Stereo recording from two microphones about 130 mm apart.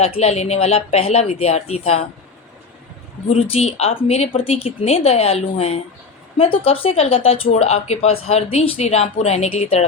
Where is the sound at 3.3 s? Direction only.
55° left (ahead or behind).